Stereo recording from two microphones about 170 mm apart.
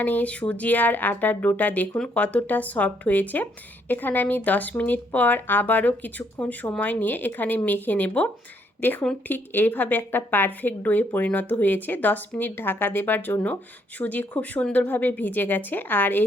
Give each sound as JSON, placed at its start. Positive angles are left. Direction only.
{"t": 0.0, "sound": "speech", "side_deg": 10}